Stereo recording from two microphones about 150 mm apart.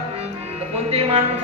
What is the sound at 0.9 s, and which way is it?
Speech, 40° right (ahead or behind).